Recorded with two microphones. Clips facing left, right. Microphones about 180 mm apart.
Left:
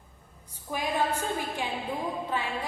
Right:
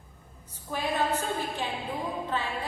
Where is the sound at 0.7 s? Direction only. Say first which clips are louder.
Even; 10° left (ahead or behind).